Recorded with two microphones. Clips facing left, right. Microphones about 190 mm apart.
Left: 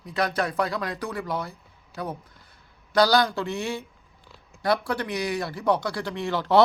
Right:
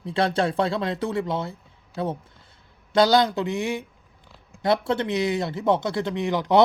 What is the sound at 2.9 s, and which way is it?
Speech, 20° right (ahead or behind).